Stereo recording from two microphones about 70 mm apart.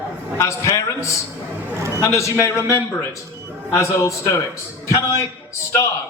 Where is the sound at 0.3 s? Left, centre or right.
Left.